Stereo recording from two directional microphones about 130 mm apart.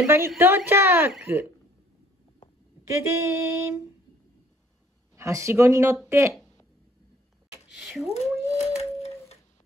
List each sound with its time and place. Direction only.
0.0 s a woman's voice: 20° right (ahead or behind)
3.0 s speech: 20° right (ahead or behind)
5.1 s speech: 25° right (ahead or behind)
7.7 s cat: 5° right (ahead or behind)
8.1 s speech: 55° left (ahead or behind)